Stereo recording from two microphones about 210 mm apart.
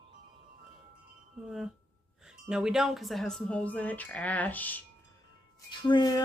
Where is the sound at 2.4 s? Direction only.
5° right (ahead or behind).